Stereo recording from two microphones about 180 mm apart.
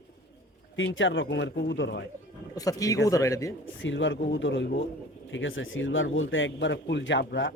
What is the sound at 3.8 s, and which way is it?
Speech, 90° left.